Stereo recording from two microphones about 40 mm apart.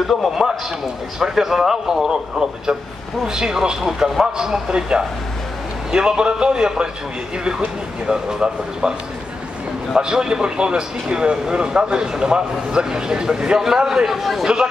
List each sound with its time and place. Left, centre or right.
0.4 s a man's voice: centre
8.1 s speech: centre
9.9 s a man's voice: centre
14.4 s a man's voice: centre